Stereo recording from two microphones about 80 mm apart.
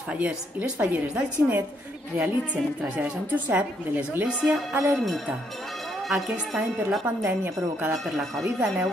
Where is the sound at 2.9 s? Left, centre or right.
Centre.